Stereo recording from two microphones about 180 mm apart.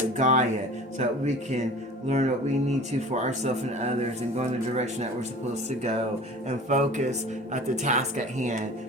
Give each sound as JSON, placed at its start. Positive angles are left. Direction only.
{"t": 0.2, "sound": "speech", "side_deg": -40}